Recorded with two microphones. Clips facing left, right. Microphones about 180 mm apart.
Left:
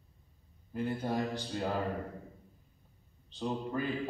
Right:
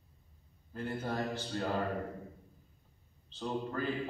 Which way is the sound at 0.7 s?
15° left (ahead or behind).